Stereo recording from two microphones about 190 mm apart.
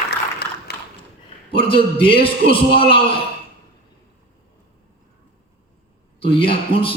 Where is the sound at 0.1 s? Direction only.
55° left (ahead or behind).